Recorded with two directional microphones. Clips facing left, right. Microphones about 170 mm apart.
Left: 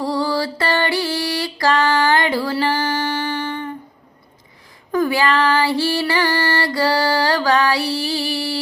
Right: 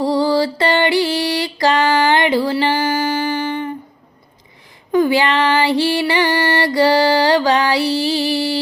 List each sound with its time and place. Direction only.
0.0 s music: 25° right (ahead or behind)
4.9 s female singing: 25° right (ahead or behind)